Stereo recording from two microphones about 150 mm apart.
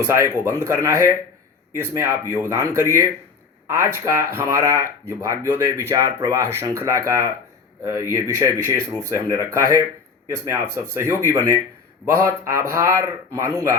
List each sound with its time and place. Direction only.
0.0 s speech: 20° right (ahead or behind)